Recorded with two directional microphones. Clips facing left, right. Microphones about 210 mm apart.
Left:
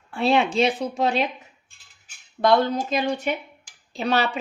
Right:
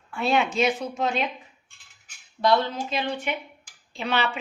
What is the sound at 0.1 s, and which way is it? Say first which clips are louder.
Speech: left 3 dB; 30° left (ahead or behind).